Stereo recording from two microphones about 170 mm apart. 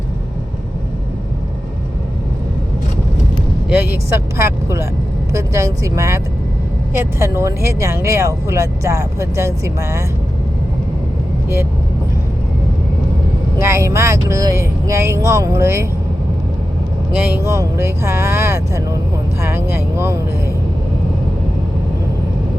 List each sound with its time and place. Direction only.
3.8 s speech: 15° right (ahead or behind)
13.6 s speech: 15° right (ahead or behind)
17.4 s speech: 15° right (ahead or behind)